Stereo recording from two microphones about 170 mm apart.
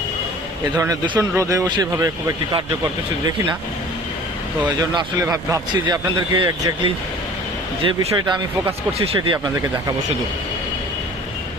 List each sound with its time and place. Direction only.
0.8 s a man's voice: 20° right (ahead or behind)
4.6 s a man's voice: 25° right (ahead or behind)